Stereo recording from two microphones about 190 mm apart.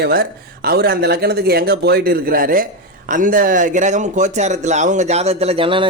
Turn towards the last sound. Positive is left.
turn(degrees=-30)  # may be behind; listen again after turning